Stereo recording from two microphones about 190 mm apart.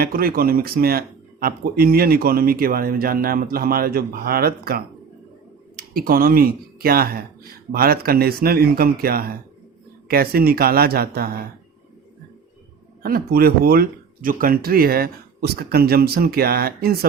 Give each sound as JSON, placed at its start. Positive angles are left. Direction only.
{"t": 0.0, "sound": "speech", "side_deg": -50}
{"t": 13.0, "sound": "speech", "side_deg": -50}